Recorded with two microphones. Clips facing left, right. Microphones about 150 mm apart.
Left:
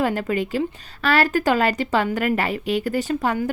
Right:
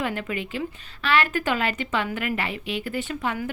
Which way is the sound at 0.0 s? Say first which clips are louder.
Left 7 dB; 40° left (ahead or behind).